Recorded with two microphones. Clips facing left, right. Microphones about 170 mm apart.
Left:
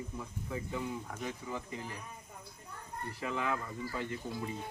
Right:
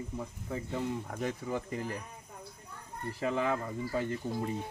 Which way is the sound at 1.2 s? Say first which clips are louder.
Right 5 dB; 50° right (ahead or behind).